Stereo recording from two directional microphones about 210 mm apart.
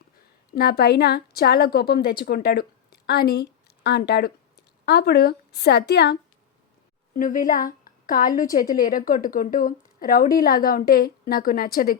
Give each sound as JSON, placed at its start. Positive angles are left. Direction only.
{"t": 0.5, "sound": "a woman's voice", "side_deg": 50}
{"t": 7.1, "sound": "a woman's voice", "side_deg": 40}